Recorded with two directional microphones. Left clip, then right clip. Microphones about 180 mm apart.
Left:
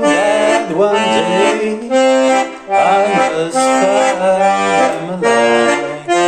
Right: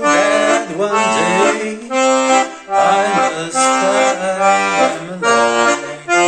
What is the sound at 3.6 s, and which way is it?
Accordion, 10° right (ahead or behind).